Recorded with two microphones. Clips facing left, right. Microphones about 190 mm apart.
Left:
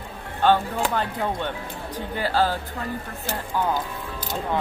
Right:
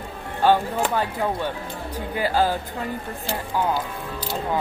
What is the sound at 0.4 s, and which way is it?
Speech, 10° right (ahead or behind).